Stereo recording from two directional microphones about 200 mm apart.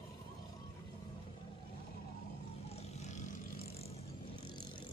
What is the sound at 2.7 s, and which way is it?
Vehicle, 30° left (ahead or behind).